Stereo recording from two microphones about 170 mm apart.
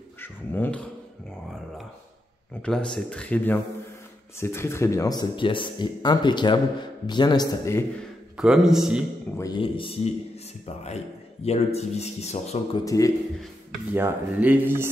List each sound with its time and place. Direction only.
0.2 s dog: 10° left (ahead or behind)
2.6 s speech: 5° left (ahead or behind); by 7.8 s 20° left (ahead or behind)
8.4 s a man's voice: 5° right (ahead or behind)
9.4 s speech: 25° left (ahead or behind)
12.8 s speech: 20° left (ahead or behind)
13.9 s speech: 10° right (ahead or behind)